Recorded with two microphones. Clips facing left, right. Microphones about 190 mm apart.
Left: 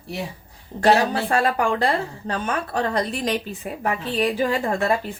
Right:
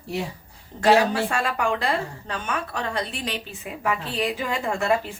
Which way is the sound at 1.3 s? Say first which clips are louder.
Left 4 dB; 35° left (ahead or behind).